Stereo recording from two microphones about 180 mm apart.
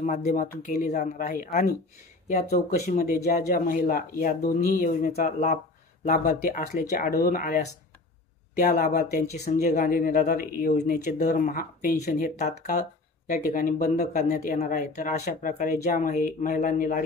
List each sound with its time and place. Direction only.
0.0 s speech: 40° left (ahead or behind)
6.0 s speech: 55° left (ahead or behind)